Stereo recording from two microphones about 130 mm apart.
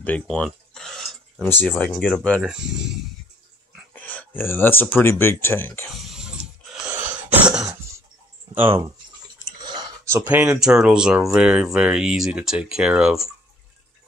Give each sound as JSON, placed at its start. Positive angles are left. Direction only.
{"t": 0.0, "sound": "a sound", "side_deg": 10}
{"t": 1.4, "sound": "speech", "side_deg": 15}
{"t": 3.9, "sound": "speech", "side_deg": 10}
{"t": 5.9, "sound": "a sound", "side_deg": 0}
{"t": 7.0, "sound": "cough", "side_deg": -15}
{"t": 9.6, "sound": "chewing", "side_deg": -35}
{"t": 10.1, "sound": "speech", "side_deg": -10}